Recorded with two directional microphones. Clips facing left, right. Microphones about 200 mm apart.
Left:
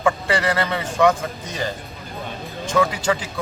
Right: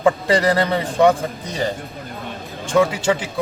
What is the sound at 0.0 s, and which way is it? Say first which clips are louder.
Speech: right 4 dB; 35° right (ahead or behind).